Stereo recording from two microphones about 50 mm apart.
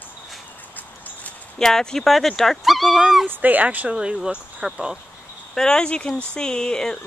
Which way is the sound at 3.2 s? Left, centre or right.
Right.